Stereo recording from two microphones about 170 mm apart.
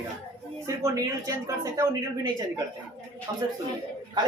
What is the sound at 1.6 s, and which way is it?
Speech, 20° right (ahead or behind).